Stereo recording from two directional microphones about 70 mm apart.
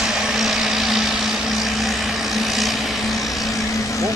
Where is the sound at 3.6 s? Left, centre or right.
Left.